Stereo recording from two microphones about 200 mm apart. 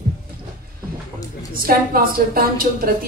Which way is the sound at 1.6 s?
45° right (ahead or behind).